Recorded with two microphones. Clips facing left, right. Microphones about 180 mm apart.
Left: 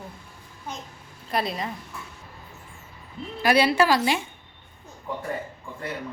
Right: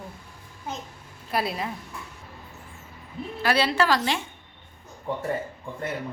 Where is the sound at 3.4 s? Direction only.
15° left (ahead or behind).